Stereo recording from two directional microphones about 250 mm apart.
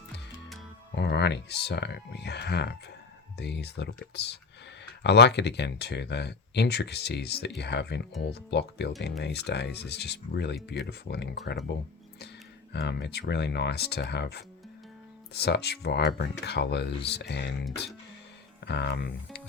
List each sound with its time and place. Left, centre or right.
0.9 s speech: left
12.7 s speech: left